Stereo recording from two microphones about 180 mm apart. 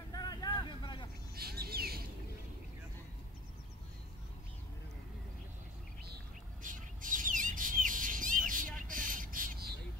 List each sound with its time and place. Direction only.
0.1 s vehicle: 20° left (ahead or behind)
1.3 s bird: 60° right (ahead or behind)
6.6 s bird: 45° right (ahead or behind)